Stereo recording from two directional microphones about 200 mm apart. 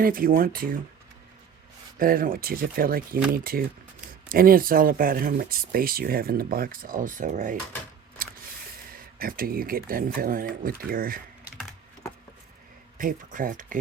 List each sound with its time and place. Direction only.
0.0 s speech: 45° right (ahead or behind)
2.0 s speech: 45° right (ahead or behind)
8.9 s speech: 45° right (ahead or behind)
12.0 s vehicle: 15° left (ahead or behind)
13.0 s speech: 40° right (ahead or behind)